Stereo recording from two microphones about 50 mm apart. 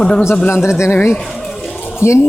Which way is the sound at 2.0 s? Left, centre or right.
Left.